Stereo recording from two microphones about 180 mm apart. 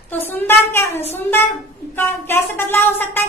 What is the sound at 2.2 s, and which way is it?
A woman's voice, 10° left (ahead or behind).